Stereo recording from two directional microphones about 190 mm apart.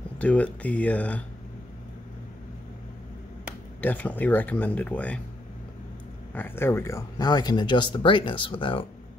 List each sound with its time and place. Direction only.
0.2 s speech: 5° left (ahead or behind)
3.8 s speech: 10° left (ahead or behind)
6.3 s speech: 10° left (ahead or behind); by 8.8 s 25° left (ahead or behind)